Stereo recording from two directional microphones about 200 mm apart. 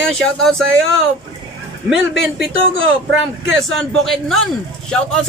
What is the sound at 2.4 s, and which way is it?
Speech, 75° right (ahead or behind).